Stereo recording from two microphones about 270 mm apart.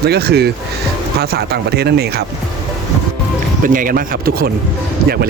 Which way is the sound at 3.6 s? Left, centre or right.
Right.